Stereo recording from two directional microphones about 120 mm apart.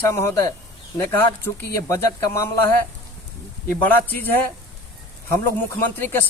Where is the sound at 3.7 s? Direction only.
15° left (ahead or behind).